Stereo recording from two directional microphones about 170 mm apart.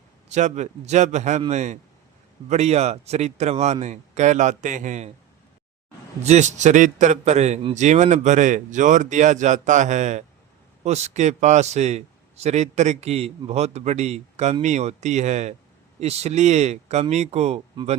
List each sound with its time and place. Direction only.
0.3 s a man's voice: 40° right (ahead or behind)
6.2 s a man's voice: 45° right (ahead or behind)